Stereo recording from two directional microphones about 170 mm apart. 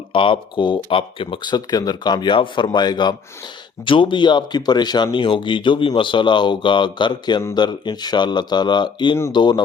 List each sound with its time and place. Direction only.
0.1 s speech: 30° left (ahead or behind)